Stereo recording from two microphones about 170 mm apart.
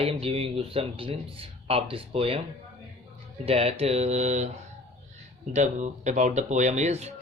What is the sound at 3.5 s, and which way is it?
Speech, 35° right (ahead or behind).